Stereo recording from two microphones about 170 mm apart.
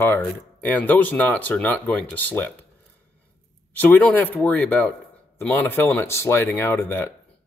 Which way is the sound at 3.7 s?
10° left (ahead or behind).